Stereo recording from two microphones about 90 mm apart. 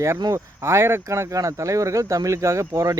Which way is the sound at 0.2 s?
35° right (ahead or behind).